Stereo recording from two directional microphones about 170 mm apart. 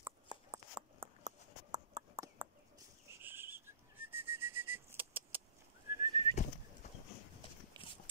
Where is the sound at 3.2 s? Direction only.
10° right (ahead or behind).